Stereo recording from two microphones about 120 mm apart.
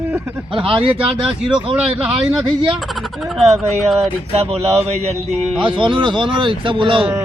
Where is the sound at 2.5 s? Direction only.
45° right (ahead or behind).